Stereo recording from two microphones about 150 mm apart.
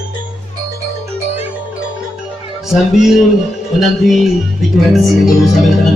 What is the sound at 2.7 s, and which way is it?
Speech, centre (ahead or behind).